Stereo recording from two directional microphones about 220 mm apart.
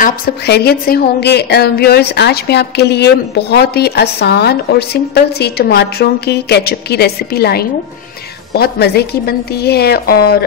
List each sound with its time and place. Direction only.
0.0 s a woman's voice: 45° left (ahead or behind)